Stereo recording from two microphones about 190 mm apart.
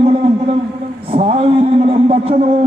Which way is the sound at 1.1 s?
30° right (ahead or behind).